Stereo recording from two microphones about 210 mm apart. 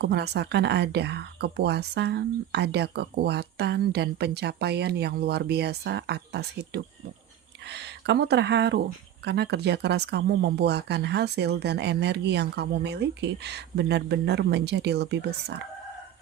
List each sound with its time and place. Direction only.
0.0 s speech: 55° right (ahead or behind)